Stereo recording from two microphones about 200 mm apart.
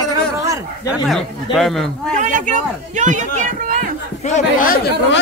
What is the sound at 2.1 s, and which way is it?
A man's voice, 40° right (ahead or behind).